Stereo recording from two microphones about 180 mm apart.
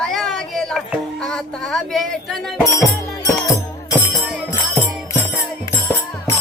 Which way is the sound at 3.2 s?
20° left (ahead or behind).